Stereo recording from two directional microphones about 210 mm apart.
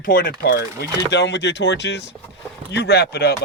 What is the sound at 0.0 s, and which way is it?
Speech, 45° left (ahead or behind).